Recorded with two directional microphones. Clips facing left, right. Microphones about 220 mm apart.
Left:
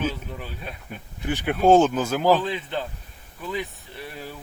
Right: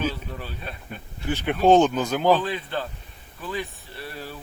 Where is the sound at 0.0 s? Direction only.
5° left (ahead or behind).